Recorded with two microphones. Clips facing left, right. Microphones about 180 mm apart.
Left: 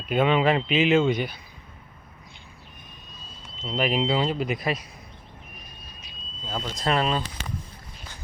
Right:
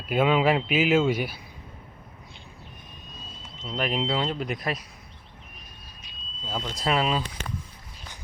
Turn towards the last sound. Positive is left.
turn(degrees=-5)  # may be behind; listen again after turning